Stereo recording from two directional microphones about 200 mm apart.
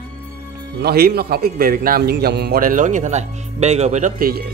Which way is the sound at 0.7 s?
50° right (ahead or behind).